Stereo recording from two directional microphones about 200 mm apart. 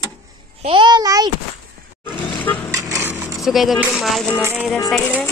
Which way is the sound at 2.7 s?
10° right (ahead or behind).